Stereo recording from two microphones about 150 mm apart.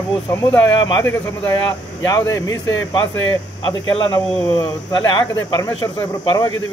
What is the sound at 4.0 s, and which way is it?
Speech, 30° left (ahead or behind).